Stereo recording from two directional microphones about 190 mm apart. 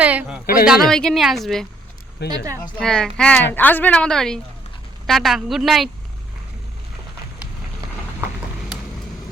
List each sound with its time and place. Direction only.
0.0 s speech: 5° right (ahead or behind)
0.4 s speech: 50° left (ahead or behind)
0.7 s a woman's voice: centre (ahead or behind)
2.2 s speech: 60° left (ahead or behind)
2.7 s a woman's voice: 5° left (ahead or behind)